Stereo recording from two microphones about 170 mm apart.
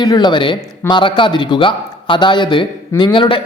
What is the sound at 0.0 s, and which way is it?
Speech, 25° left (ahead or behind).